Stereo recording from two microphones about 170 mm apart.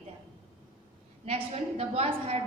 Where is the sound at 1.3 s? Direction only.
35° right (ahead or behind).